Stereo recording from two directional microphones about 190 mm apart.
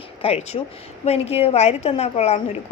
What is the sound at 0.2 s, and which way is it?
A woman's voice, 30° left (ahead or behind).